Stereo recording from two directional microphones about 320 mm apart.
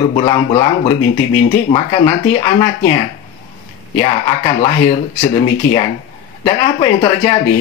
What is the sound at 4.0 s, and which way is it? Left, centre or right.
Speech, centre.